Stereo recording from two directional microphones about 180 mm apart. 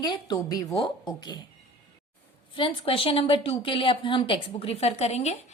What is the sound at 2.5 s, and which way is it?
Speech, 30° left (ahead or behind).